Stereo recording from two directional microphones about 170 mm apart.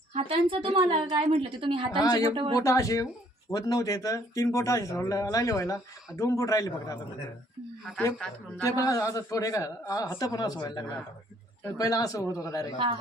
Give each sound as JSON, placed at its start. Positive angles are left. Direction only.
{"t": 0.1, "sound": "a woman's voice", "side_deg": -35}
{"t": 2.0, "sound": "speech", "side_deg": 20}
{"t": 8.6, "sound": "speech", "side_deg": 20}